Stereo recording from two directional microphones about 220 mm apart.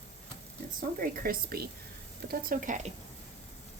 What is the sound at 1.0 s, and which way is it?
Speech, 40° right (ahead or behind).